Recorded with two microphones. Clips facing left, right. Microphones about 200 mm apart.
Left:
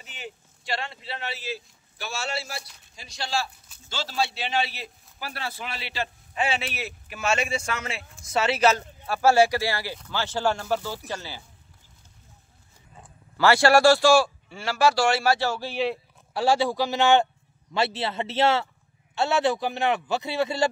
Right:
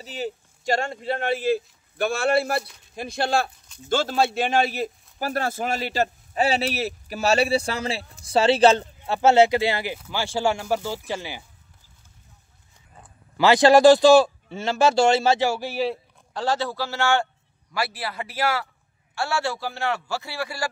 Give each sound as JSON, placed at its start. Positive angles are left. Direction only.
{"t": 0.0, "sound": "speech", "side_deg": -35}
{"t": 9.9, "sound": "speech", "side_deg": -10}
{"t": 13.4, "sound": "speech", "side_deg": -20}
{"t": 16.3, "sound": "a man's voice", "side_deg": 10}